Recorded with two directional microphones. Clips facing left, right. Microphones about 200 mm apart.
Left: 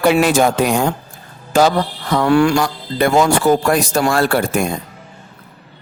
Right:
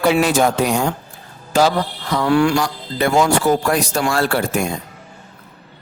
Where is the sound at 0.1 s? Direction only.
55° left (ahead or behind).